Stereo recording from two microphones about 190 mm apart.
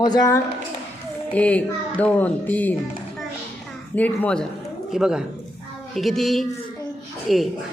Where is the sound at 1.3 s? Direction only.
5° left (ahead or behind).